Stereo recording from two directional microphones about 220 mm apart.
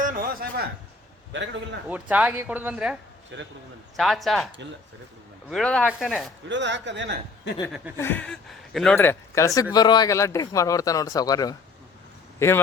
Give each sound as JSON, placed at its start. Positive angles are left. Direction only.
{"t": 0.0, "sound": "a sound", "side_deg": -40}
{"t": 1.3, "sound": "a man's voice", "side_deg": -55}
{"t": 1.9, "sound": "speech", "side_deg": -5}
{"t": 3.3, "sound": "a man's voice", "side_deg": -55}
{"t": 3.9, "sound": "speech", "side_deg": 0}
{"t": 5.5, "sound": "speech", "side_deg": 5}
{"t": 6.5, "sound": "a man's voice", "side_deg": -55}
{"t": 7.9, "sound": "a man's voice", "side_deg": 10}